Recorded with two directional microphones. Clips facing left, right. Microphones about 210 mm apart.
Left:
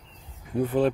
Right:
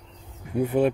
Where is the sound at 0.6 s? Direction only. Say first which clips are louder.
Right 1 dB; 10° right (ahead or behind).